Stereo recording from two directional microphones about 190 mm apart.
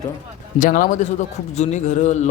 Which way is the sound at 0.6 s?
45° left (ahead or behind).